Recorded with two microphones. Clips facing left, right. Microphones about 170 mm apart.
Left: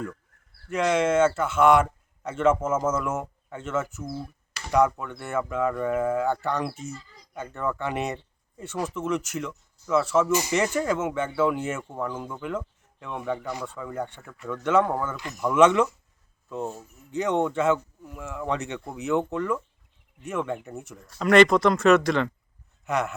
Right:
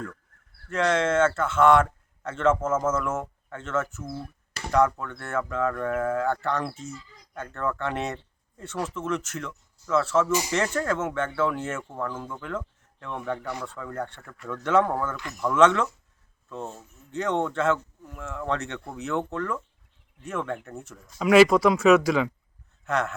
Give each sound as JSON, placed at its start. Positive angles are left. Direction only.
{"t": 0.7, "sound": "speech", "side_deg": 10}
{"t": 15.1, "sound": "speech", "side_deg": 20}
{"t": 21.0, "sound": "speech", "side_deg": -5}
{"t": 22.9, "sound": "speech", "side_deg": 10}